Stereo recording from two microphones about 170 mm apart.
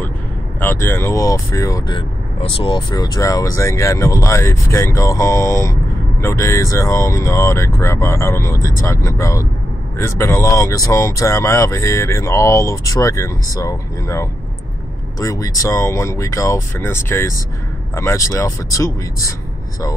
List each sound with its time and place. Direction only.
0.6 s speech: 10° left (ahead or behind)